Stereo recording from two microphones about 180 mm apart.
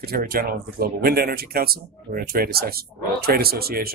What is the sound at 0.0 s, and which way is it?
Speech, 55° right (ahead or behind).